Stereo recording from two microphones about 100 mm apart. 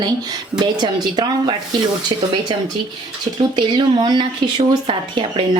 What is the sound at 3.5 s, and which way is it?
Speech, 45° right (ahead or behind).